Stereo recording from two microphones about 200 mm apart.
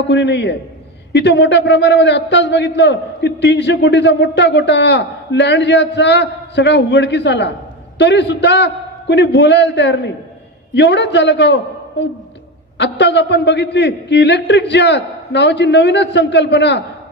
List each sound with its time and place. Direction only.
0.1 s a man's voice: 60° left (ahead or behind)